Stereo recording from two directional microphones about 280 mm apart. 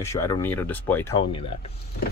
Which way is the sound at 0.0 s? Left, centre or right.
Centre.